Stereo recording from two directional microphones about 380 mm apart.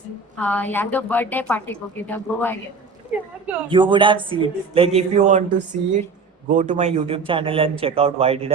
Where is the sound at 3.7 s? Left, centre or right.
Centre.